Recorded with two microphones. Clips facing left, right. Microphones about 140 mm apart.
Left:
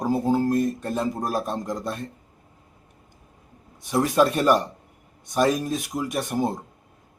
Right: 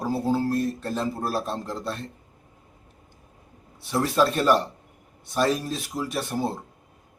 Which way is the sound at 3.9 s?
15° left (ahead or behind).